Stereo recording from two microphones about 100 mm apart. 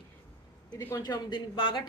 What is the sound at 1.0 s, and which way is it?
Speech, 50° left (ahead or behind).